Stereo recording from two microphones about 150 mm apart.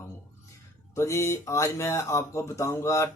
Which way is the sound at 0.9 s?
20° left (ahead or behind).